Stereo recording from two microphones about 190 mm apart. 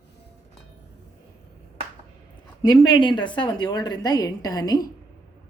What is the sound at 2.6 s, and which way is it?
A woman's voice, 25° left (ahead or behind).